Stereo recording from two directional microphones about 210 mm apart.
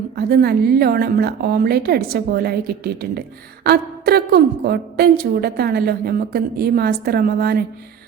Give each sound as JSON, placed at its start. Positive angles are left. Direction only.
{"t": 0.2, "sound": "a woman's voice", "side_deg": -50}